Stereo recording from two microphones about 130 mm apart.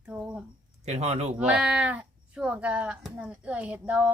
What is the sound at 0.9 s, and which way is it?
Speech, 55° right (ahead or behind).